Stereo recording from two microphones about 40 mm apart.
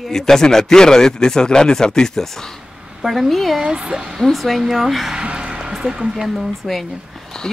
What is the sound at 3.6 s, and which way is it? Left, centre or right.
Speech, right.